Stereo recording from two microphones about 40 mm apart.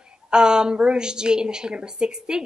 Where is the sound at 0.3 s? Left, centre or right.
Centre.